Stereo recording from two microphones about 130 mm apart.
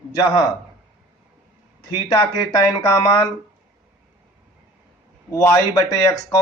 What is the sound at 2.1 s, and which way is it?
Speech, 25° left (ahead or behind).